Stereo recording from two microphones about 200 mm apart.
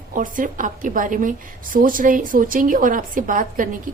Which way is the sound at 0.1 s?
40° right (ahead or behind).